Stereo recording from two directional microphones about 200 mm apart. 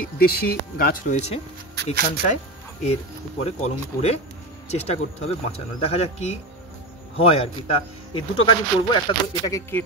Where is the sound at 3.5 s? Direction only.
30° left (ahead or behind).